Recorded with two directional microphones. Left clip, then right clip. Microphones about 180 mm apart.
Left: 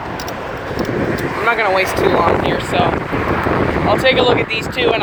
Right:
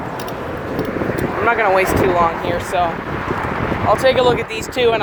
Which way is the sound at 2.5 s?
20° right (ahead or behind).